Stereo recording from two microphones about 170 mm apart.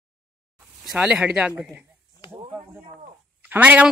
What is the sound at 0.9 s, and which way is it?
Speech, 5° right (ahead or behind).